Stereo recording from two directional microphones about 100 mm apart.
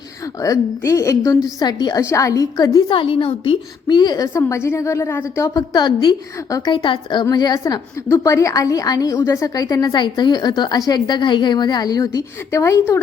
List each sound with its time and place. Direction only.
0.4 s a woman's voice: 35° left (ahead or behind)
2.0 s a woman's voice: 30° left (ahead or behind)
2.9 s a woman's voice: 60° left (ahead or behind); by 5.6 s 30° left (ahead or behind)
5.7 s a woman's voice: 45° left (ahead or behind)
6.7 s a woman's voice: 55° left (ahead or behind)
7.3 s a woman's voice: 40° left (ahead or behind)
8.1 s a woman's voice: 30° left (ahead or behind)